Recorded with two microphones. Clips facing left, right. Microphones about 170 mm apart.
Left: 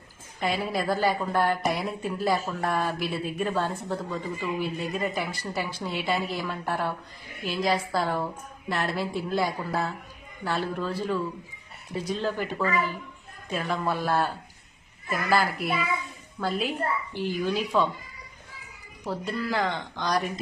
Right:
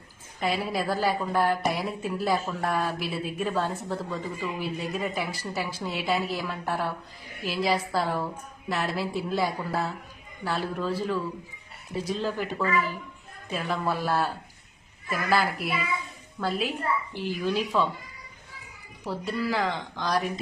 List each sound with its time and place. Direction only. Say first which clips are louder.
0.3 s a woman's voice: even; centre (ahead or behind)
19.0 s a woman's voice: right 1 dB; centre (ahead or behind)